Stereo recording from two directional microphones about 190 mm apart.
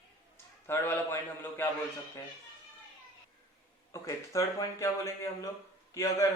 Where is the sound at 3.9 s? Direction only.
15° left (ahead or behind).